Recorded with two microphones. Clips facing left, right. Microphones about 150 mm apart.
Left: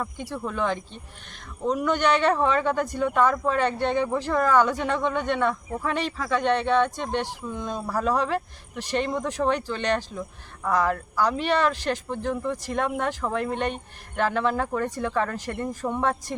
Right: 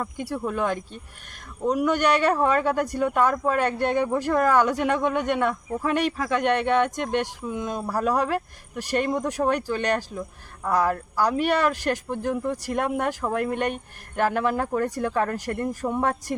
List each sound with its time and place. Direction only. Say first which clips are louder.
0.0 s speech: right 2 dB; 10° right (ahead or behind)
13.3 s speech: right 2 dB; 50° right (ahead or behind)
14.2 s speech: right 1 dB; 10° right (ahead or behind)